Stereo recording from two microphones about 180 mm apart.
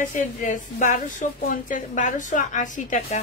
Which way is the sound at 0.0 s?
45° left (ahead or behind).